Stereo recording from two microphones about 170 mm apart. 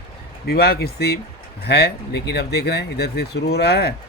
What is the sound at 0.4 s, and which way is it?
Speech, 65° left (ahead or behind).